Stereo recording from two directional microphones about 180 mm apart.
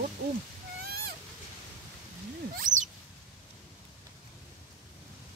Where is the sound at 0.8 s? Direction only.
60° right (ahead or behind).